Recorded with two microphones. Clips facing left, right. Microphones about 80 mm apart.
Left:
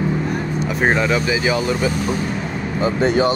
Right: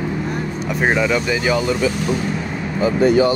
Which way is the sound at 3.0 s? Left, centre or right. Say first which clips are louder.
Right 3 dB; left.